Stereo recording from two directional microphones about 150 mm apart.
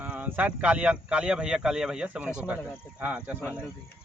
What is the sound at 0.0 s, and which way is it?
Speech, 10° right (ahead or behind).